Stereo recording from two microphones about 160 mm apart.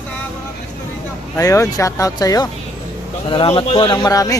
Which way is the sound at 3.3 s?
35° left (ahead or behind).